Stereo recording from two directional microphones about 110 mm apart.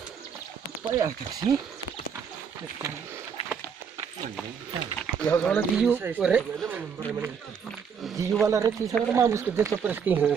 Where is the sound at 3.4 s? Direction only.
65° left (ahead or behind).